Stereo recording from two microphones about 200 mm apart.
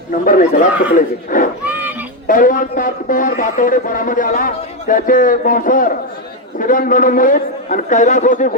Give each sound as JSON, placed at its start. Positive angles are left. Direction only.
{"t": 0.1, "sound": "speech", "side_deg": 40}
{"t": 1.6, "sound": "a sound", "side_deg": -10}
{"t": 2.2, "sound": "speech", "side_deg": 45}